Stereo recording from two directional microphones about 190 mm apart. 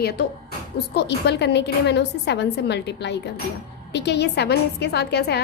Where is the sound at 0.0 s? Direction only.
55° left (ahead or behind).